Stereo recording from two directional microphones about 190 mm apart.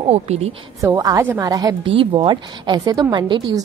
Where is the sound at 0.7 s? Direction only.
20° right (ahead or behind).